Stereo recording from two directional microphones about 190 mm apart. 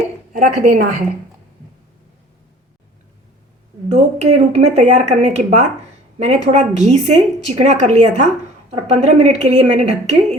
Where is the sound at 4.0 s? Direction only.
35° right (ahead or behind).